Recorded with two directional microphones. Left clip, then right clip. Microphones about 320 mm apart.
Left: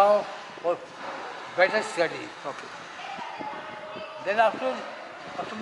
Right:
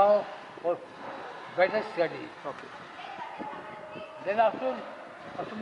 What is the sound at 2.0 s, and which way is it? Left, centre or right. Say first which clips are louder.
Speech: left 3 dB; centre.